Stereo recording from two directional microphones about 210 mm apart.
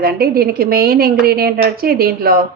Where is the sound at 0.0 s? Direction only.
45° right (ahead or behind).